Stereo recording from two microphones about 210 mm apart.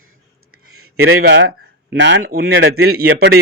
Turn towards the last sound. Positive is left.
turn(degrees=-50)  # may be behind; listen again after turning